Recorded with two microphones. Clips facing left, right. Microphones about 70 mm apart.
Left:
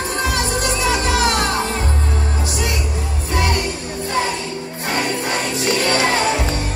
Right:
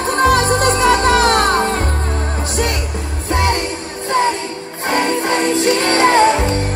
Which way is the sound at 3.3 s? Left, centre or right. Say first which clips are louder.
Right 3 dB; right.